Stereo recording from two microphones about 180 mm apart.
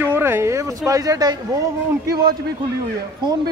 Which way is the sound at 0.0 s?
15° right (ahead or behind).